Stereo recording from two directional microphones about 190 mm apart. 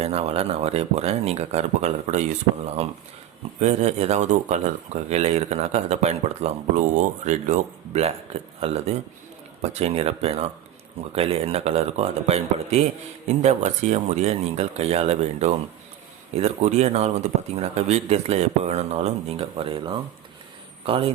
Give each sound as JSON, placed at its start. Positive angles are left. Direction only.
{"t": 0.0, "sound": "speech", "side_deg": -35}
{"t": 3.6, "sound": "speech", "side_deg": -40}